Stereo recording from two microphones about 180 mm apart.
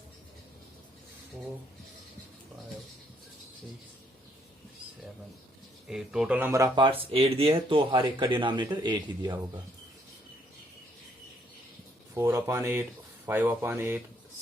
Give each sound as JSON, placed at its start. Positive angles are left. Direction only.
{"t": 5.9, "sound": "speech", "side_deg": -5}
{"t": 12.1, "sound": "speech", "side_deg": -15}